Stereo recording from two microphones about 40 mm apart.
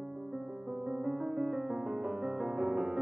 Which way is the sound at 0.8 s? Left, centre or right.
Centre.